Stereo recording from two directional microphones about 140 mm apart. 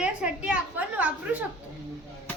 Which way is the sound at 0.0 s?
5° right (ahead or behind).